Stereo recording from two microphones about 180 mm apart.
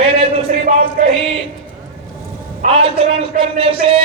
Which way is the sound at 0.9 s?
45° right (ahead or behind).